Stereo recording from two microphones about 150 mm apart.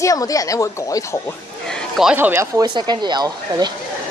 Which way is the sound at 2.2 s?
15° right (ahead or behind).